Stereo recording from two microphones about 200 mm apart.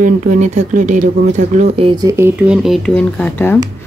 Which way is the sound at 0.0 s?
40° right (ahead or behind).